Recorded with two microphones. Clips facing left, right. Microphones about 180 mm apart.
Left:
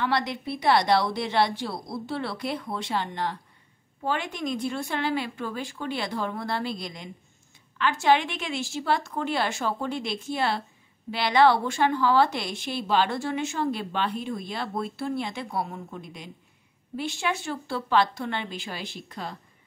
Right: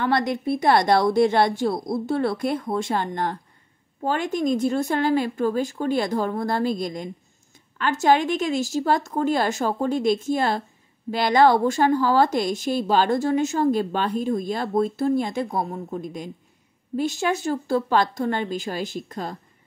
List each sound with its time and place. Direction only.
0.0 s speech: 50° right (ahead or behind)